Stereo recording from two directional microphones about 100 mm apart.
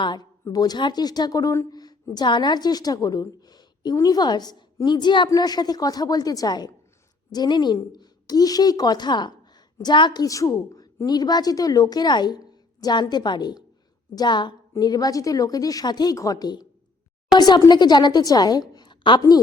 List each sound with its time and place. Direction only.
0.0 s a woman's voice: 45° left (ahead or behind)
10.2 s a woman's voice: 35° left (ahead or behind)